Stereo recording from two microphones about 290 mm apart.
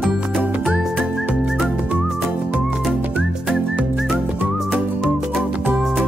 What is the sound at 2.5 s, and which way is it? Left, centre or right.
Whistling, centre.